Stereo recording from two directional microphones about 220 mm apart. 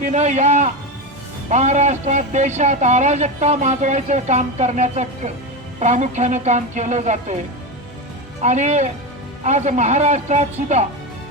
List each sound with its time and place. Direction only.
0.0 s speech: 35° right (ahead or behind)
8.4 s speech: 30° right (ahead or behind)